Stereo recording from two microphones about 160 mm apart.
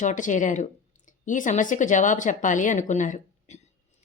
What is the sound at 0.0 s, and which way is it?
A woman's voice, 50° left (ahead or behind).